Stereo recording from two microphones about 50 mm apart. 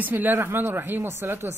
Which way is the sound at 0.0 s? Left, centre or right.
Right.